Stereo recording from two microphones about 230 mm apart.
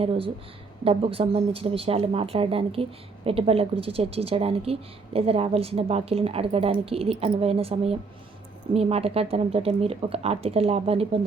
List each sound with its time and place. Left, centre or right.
0.0 s speech: right